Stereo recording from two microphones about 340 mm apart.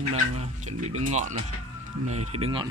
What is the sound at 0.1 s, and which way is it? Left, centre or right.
Speech, centre.